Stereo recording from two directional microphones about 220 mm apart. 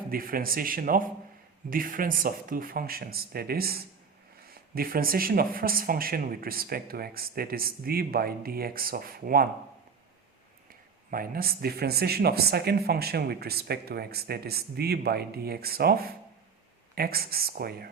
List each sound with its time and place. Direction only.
0.1 s speech: 40° right (ahead or behind)
11.1 s speech: 40° right (ahead or behind)